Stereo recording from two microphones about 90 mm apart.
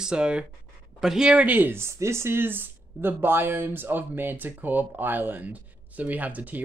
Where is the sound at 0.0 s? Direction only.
10° right (ahead or behind).